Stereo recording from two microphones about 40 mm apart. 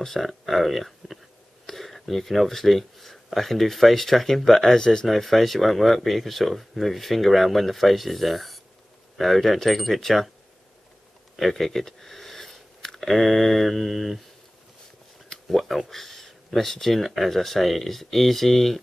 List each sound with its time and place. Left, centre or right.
0.0 s speech: centre
5.0 s speech: centre
11.3 s speech: centre
15.2 s speech: centre